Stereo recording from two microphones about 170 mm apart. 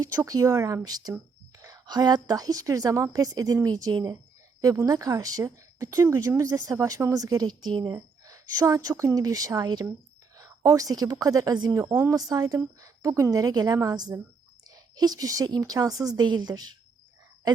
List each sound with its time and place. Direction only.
0.0 s speech: 20° right (ahead or behind)